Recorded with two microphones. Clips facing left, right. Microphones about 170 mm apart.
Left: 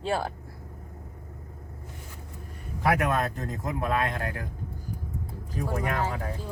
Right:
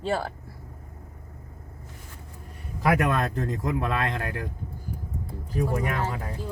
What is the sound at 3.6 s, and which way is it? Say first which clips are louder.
Speech: left 1 dB; 90° right.